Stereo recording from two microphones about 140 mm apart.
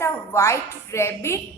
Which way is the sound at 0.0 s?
20° left (ahead or behind).